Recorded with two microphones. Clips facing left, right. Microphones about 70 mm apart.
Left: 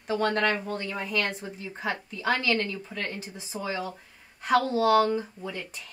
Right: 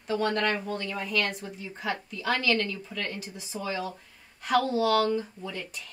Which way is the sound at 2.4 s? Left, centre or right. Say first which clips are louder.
Even; centre.